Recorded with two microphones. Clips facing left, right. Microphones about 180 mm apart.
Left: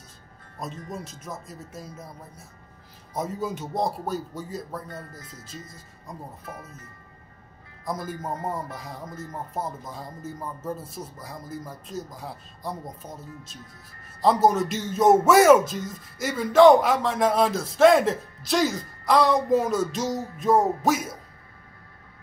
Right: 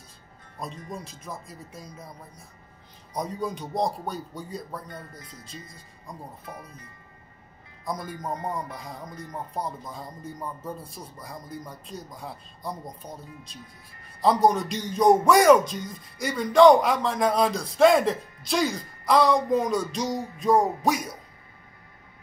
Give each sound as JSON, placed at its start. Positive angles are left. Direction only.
{"t": 0.8, "sound": "speech", "side_deg": 0}
{"t": 6.4, "sound": "speech", "side_deg": -15}
{"t": 7.8, "sound": "speech", "side_deg": 0}